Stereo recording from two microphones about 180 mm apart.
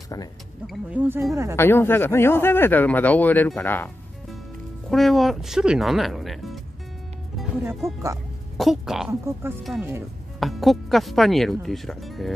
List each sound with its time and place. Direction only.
0.7 s speech: 5° right (ahead or behind)
1.6 s speech: 10° left (ahead or behind)
7.8 s speech: 15° right (ahead or behind)
8.5 s speech: centre (ahead or behind)
10.4 s speech: centre (ahead or behind)